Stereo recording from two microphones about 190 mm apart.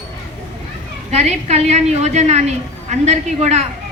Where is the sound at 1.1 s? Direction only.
35° right (ahead or behind).